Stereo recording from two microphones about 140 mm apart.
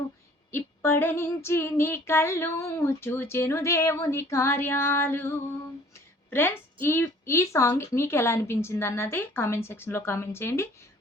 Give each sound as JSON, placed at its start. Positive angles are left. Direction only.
{"t": 0.5, "sound": "female singing", "side_deg": 15}